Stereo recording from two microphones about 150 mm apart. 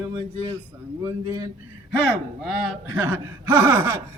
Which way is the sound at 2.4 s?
Centre (ahead or behind).